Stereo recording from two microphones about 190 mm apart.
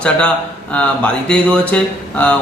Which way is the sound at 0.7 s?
5° left (ahead or behind).